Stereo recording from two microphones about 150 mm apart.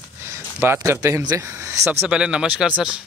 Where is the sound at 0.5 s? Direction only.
10° right (ahead or behind).